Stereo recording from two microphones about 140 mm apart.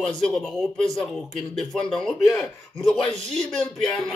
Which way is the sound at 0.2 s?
5° left (ahead or behind).